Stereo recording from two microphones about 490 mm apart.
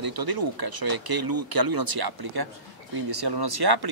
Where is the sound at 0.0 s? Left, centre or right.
Right.